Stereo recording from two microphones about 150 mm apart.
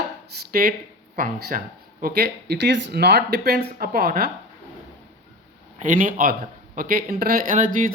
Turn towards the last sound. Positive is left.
turn(degrees=-65)  # may be behind; listen again after turning